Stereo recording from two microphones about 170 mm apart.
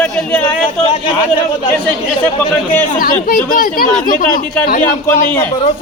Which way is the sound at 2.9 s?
55° left (ahead or behind).